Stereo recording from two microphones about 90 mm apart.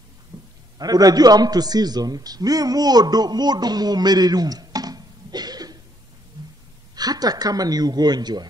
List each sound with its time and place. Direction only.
0.3 s a sound: 60° right (ahead or behind)
0.7 s a man's voice: 45° right (ahead or behind)
7.0 s speech: 45° right (ahead or behind)